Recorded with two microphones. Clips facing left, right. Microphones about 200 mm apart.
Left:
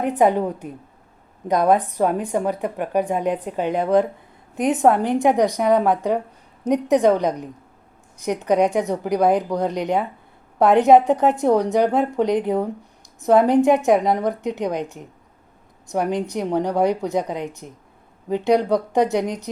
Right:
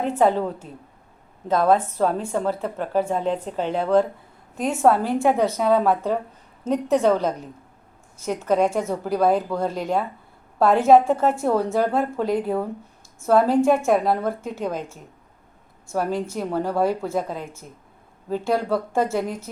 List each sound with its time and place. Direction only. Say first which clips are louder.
0.0 s a woman's voice: left 2 dB; 15° left (ahead or behind)